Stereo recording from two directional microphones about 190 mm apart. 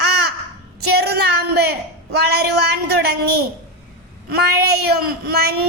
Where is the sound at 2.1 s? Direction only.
60° right (ahead or behind).